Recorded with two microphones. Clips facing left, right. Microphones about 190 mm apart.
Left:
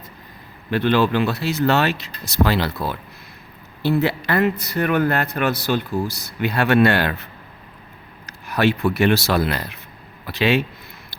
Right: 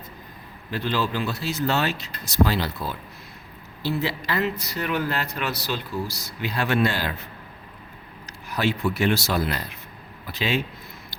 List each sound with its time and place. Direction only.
0.7 s speech: 65° left (ahead or behind)
8.3 s speech: 60° left (ahead or behind)